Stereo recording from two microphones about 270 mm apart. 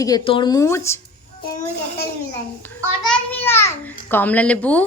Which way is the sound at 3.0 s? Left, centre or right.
Centre.